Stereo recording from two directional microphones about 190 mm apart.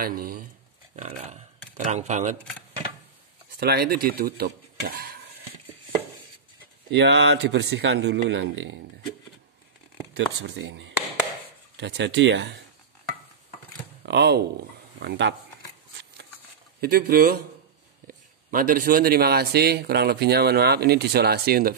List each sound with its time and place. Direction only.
0.0 s speech: 50° right (ahead or behind)
3.5 s speech: 55° right (ahead or behind)
6.9 s speech: 65° right (ahead or behind)
10.1 s speech: 75° right (ahead or behind)
11.7 s speech: 65° right (ahead or behind)
14.0 s speech: 65° right (ahead or behind)
16.8 s speech: 50° right (ahead or behind)